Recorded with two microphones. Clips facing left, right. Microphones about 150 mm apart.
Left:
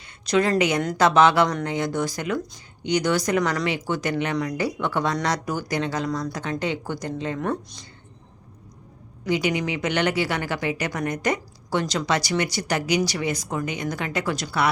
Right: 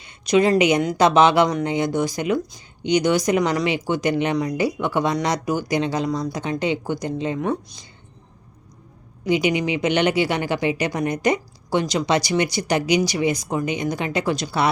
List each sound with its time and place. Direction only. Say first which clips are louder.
0.0 s a sound: right 4 dB; 20° right (ahead or behind)
0.9 s speech: right 1 dB; 20° right (ahead or behind)
9.2 s speech: right 4 dB; 20° right (ahead or behind)